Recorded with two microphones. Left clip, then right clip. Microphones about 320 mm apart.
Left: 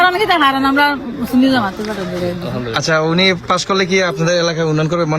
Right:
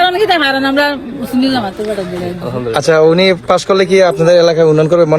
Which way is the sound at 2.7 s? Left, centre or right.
Centre.